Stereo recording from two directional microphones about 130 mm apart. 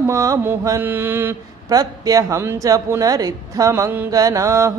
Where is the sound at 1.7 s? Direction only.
30° right (ahead or behind).